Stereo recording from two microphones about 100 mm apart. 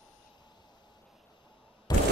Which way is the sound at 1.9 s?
45° left (ahead or behind).